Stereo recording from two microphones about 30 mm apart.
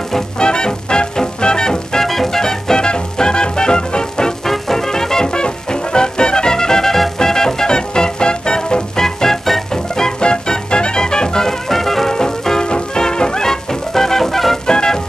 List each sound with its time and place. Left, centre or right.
0.4 s music: left
2.0 s music: centre
2.8 s music: left
4.5 s music: centre
5.3 s music: left
8.9 s music: centre
10.0 s music: left; by 12.1 s centre
12.1 s music: left
14.7 s music: left